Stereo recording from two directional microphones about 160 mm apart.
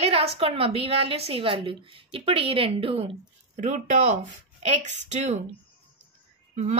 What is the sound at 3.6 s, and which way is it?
Speech, 50° right (ahead or behind).